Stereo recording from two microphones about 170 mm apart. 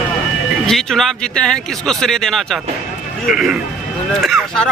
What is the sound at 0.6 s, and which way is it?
Speech, centre (ahead or behind).